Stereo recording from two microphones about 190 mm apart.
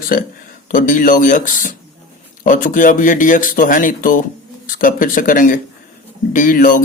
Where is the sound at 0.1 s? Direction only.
50° left (ahead or behind).